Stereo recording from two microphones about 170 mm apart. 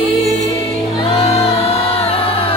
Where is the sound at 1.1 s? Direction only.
40° left (ahead or behind).